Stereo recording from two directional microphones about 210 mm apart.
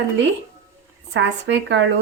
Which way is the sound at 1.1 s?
55° right (ahead or behind).